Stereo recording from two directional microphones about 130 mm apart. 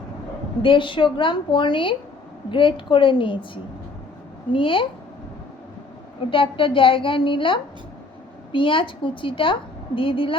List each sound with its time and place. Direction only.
0.6 s a woman's voice: 40° left (ahead or behind)
6.3 s a woman's voice: 40° left (ahead or behind)